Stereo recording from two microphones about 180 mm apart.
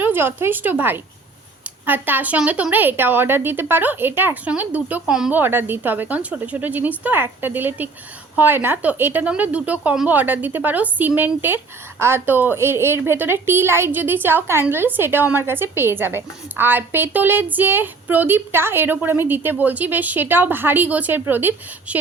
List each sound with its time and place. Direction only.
0.0 s a woman's voice: 10° right (ahead or behind)